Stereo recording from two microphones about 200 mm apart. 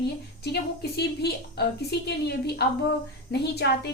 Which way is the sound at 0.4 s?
55° left (ahead or behind).